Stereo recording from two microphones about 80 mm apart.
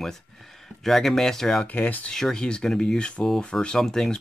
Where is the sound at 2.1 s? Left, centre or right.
Centre.